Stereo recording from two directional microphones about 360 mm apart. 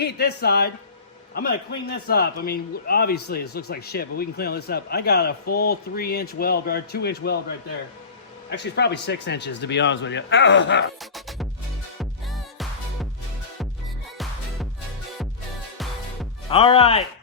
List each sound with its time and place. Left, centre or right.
0.0 s a man's voice: left
8.4 s a man's voice: left
11.0 s music: centre
16.5 s speech: centre